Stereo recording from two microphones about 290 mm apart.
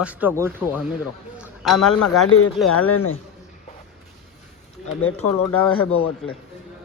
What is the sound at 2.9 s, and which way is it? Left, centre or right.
Speech, left.